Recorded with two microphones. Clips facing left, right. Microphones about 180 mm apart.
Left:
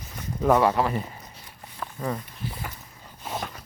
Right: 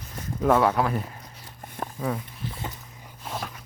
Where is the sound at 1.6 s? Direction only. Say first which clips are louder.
Right 3 dB; 50° right (ahead or behind).